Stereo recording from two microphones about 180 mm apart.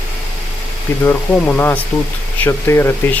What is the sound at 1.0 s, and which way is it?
Speech, 10° left (ahead or behind).